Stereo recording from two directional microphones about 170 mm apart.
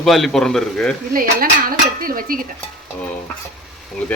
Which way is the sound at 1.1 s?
55° right (ahead or behind).